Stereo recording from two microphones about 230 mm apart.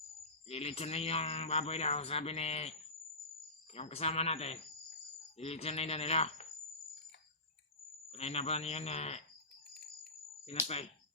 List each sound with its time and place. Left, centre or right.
0.4 s a man's voice: left
3.8 s a man's voice: left
8.1 s a man's voice: left
10.4 s a man's voice: left